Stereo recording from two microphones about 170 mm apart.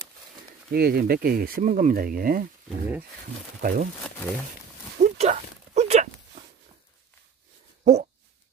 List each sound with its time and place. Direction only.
0.7 s speech: 65° right (ahead or behind)
3.6 s speech: 50° right (ahead or behind)
5.0 s a sound: 45° right (ahead or behind)
7.8 s dog: 40° right (ahead or behind)